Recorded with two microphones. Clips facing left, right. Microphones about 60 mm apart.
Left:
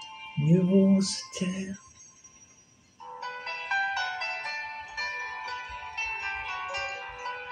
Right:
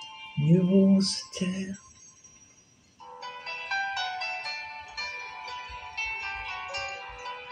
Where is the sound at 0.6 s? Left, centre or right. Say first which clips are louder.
Even; left.